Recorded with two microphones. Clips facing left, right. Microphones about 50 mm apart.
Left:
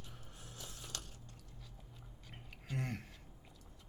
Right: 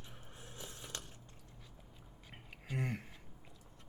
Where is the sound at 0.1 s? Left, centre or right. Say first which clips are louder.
Right 1 dB; right.